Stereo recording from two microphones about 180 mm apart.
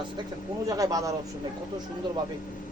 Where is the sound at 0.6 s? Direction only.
20° right (ahead or behind).